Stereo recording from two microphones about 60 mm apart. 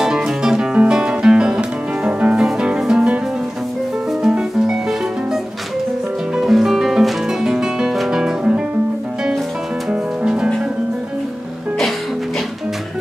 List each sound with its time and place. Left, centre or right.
0.0 s music: centre
4.2 s music: centre
6.3 s music: centre
9.8 s music: centre